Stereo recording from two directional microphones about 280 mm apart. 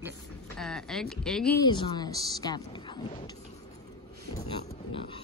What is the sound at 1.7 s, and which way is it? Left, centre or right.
Speech, centre.